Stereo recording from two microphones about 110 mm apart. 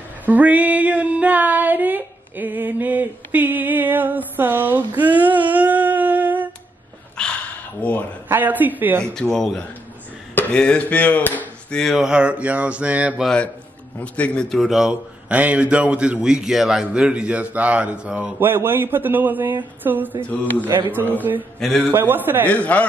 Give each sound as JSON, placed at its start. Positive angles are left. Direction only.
{"t": 0.2, "sound": "a sound", "side_deg": -15}
{"t": 7.2, "sound": "a sound", "side_deg": 5}
{"t": 7.8, "sound": "speech", "side_deg": 10}
{"t": 8.3, "sound": "a man's voice", "side_deg": -15}
{"t": 9.1, "sound": "speech", "side_deg": 5}
{"t": 12.0, "sound": "a man's voice", "side_deg": -10}
{"t": 13.2, "sound": "a man's voice", "side_deg": 10}
{"t": 21.6, "sound": "speech", "side_deg": 5}
{"t": 21.9, "sound": "speech", "side_deg": -20}
{"t": 22.5, "sound": "speech", "side_deg": 10}